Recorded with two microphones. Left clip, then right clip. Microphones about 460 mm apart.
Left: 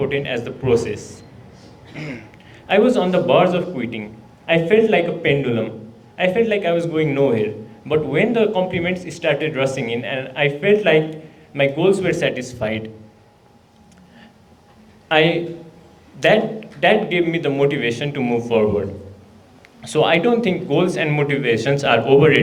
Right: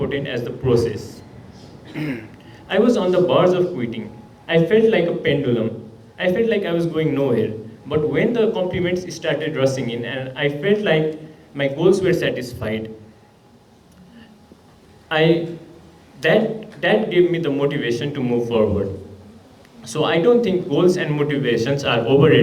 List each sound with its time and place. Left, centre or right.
0.0 s a man's voice: left
2.0 s speech: centre
2.6 s a man's voice: left
16.3 s a man's voice: left
19.9 s a man's voice: left